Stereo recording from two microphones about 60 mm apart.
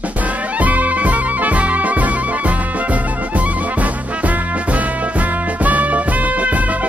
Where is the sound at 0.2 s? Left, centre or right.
Right.